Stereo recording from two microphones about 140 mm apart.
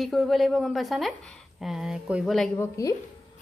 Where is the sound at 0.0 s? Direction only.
Centre (ahead or behind).